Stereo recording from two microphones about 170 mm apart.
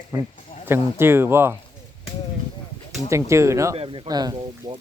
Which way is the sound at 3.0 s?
15° right (ahead or behind).